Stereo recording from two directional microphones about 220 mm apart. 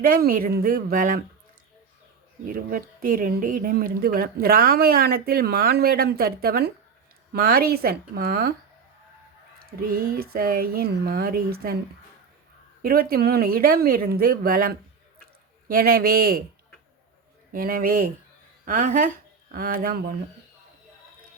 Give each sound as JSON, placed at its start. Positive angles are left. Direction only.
{"t": 0.0, "sound": "speech", "side_deg": -40}
{"t": 2.5, "sound": "speech", "side_deg": -40}
{"t": 9.6, "sound": "speech", "side_deg": -40}
{"t": 12.8, "sound": "speech", "side_deg": -40}
{"t": 17.5, "sound": "speech", "side_deg": -40}